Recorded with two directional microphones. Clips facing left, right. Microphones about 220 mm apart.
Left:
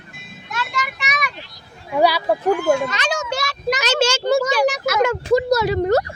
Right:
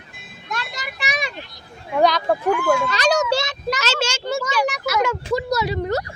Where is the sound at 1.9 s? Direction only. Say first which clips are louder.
Left 1 dB; 10° left (ahead or behind).